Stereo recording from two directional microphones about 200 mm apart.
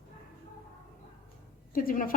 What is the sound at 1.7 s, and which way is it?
Speech, 45° left (ahead or behind).